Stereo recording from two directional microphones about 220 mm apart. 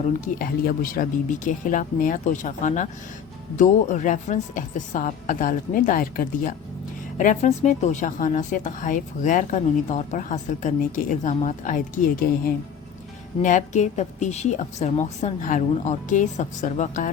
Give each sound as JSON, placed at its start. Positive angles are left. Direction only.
{"t": 0.3, "sound": "a woman's voice", "side_deg": 40}
{"t": 13.4, "sound": "a woman's voice", "side_deg": 35}